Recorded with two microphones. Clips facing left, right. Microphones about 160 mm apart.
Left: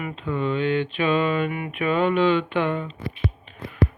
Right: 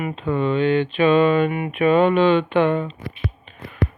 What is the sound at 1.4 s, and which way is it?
Speech, 25° right (ahead or behind).